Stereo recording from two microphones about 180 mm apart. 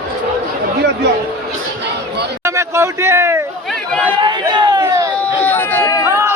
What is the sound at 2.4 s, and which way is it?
Speech, 15° right (ahead or behind).